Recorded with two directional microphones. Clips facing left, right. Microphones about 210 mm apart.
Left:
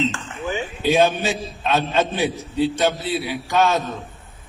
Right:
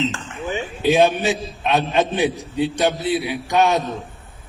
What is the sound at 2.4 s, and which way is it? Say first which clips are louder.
Speech: even; centre (ahead or behind).